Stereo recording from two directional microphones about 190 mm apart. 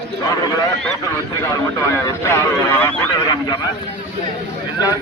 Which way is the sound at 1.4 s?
15° left (ahead or behind).